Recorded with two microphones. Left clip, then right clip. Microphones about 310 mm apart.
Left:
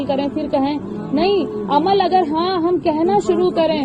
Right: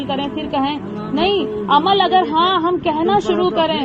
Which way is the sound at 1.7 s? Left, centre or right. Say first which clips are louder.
Right 2 dB; centre.